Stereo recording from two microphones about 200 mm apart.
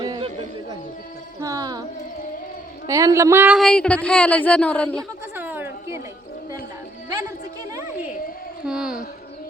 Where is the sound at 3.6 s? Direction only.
5° left (ahead or behind).